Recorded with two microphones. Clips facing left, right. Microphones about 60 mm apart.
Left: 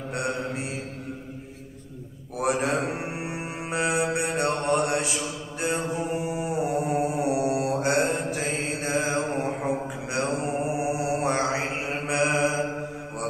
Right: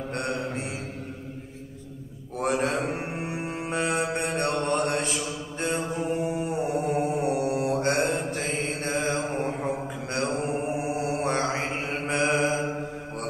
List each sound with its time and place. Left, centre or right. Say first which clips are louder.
0.1 s mantra: left 2 dB; centre
2.3 s a sound: left 1 dB; centre
3.0 s mantra: even; centre
5.9 s a sound: right 1 dB; centre
6.8 s mantra: even; centre
8.5 s mantra: even; left
9.0 s mantra: left 1 dB; centre
12.2 s mantra: even; left